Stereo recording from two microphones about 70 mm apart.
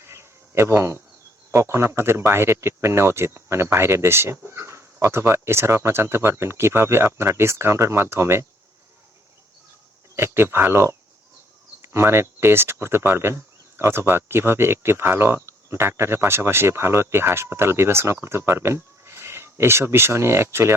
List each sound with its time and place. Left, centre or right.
0.0 s a sound: right
1.5 s speech: right
10.2 s speech: right